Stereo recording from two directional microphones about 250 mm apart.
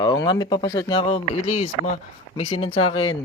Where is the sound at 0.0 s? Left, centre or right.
Centre.